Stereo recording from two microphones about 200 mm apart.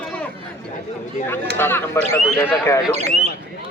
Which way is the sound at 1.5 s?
10° left (ahead or behind).